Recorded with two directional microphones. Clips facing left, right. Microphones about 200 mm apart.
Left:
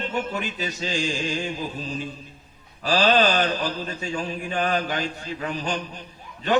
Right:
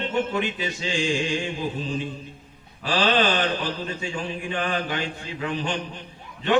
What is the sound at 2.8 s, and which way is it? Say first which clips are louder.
Mantra: left 2 dB; 40° left (ahead or behind).